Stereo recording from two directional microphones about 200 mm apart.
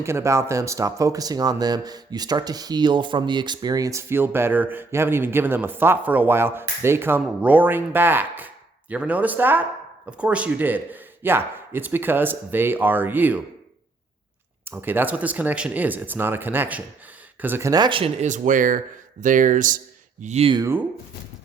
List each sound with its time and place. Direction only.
0.0 s speech: 15° right (ahead or behind)
14.7 s speech: 10° right (ahead or behind); by 19.8 s 40° right (ahead or behind)
20.2 s speech: 30° right (ahead or behind)
20.6 s speech: 10° right (ahead or behind)